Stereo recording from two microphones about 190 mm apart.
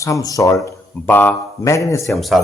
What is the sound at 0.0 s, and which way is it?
Speech, 15° left (ahead or behind).